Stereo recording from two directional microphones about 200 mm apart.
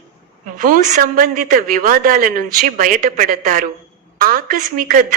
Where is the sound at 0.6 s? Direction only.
45° right (ahead or behind).